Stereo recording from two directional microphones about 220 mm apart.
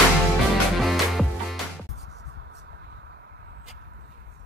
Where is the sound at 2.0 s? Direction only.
50° right (ahead or behind).